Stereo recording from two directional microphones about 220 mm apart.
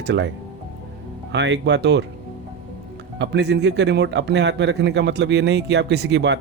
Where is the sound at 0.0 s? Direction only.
55° right (ahead or behind).